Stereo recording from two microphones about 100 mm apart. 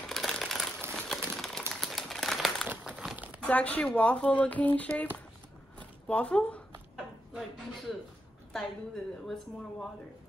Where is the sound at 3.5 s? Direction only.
15° left (ahead or behind).